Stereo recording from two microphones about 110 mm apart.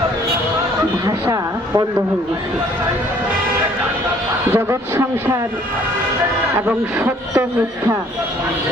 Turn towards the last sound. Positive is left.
turn(degrees=-25)  # may be behind; listen again after turning